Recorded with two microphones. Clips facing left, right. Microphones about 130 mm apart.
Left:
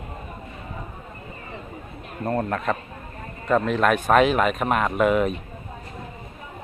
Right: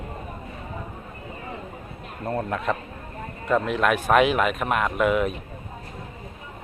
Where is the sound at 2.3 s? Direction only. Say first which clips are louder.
Left 2 dB; 5° right (ahead or behind).